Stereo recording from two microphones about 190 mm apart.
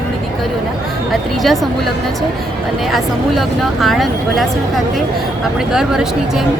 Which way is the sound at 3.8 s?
Centre (ahead or behind).